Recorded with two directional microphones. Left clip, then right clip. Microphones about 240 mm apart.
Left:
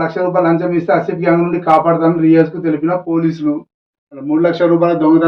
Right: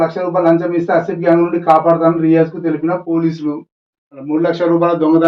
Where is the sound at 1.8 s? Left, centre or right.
Centre.